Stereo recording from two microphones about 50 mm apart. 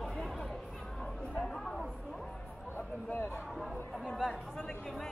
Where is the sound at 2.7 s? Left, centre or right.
Left.